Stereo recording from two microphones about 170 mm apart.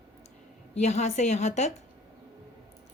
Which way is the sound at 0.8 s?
40° left (ahead or behind).